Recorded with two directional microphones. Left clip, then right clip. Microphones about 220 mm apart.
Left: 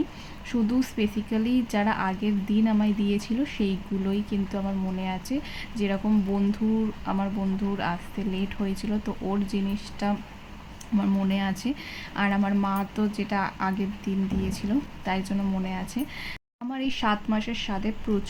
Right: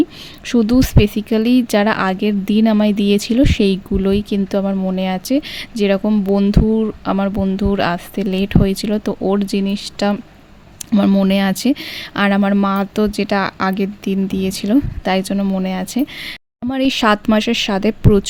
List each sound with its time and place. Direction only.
0.4 s speech: 50° right (ahead or behind)